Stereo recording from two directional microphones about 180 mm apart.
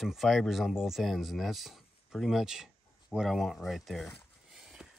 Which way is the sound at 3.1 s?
Centre (ahead or behind).